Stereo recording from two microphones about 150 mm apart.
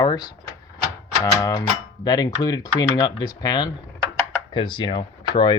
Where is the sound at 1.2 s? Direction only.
25° left (ahead or behind).